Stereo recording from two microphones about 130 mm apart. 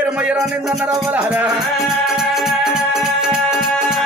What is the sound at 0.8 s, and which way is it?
Music, 20° right (ahead or behind).